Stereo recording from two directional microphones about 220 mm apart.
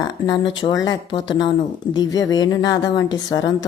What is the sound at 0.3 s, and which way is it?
Speech, 20° left (ahead or behind).